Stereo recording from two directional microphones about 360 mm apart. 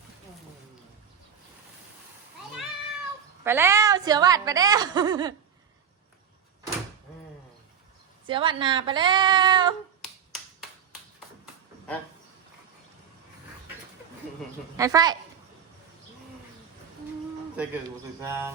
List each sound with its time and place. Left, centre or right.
3.4 s a woman's voice: centre
8.3 s a woman's voice: centre
14.8 s a woman's voice: centre
18.2 s a woman's voice: centre